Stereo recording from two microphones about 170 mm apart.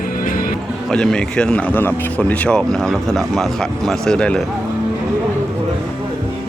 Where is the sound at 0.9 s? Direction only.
5° left (ahead or behind).